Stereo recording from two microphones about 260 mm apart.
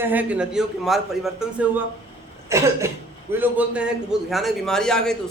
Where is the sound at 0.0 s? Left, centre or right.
Centre.